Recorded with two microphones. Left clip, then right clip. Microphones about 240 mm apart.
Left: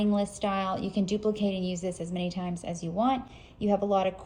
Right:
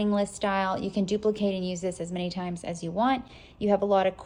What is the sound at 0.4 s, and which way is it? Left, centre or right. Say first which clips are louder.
Speech: right 3 dB; centre.